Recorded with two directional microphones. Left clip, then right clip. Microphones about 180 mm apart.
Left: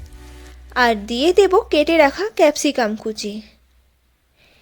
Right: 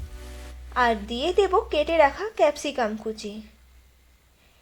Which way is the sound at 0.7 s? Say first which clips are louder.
Left 6 dB; 80° left.